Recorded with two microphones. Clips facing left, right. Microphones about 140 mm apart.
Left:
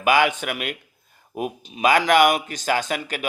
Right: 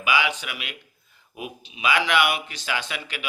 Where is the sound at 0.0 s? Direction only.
50° left (ahead or behind).